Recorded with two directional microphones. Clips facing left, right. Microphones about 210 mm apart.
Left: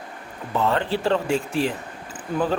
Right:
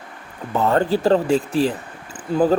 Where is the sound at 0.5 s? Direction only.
45° right (ahead or behind).